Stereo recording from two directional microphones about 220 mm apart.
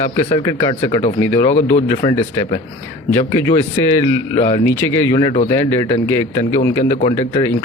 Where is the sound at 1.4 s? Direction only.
30° left (ahead or behind).